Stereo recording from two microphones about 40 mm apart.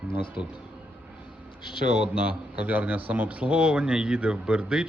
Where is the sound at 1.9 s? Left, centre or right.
Right.